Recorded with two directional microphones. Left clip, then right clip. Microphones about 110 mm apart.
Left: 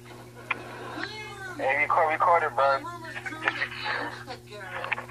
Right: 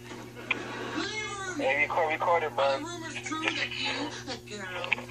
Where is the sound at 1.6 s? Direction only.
30° right (ahead or behind).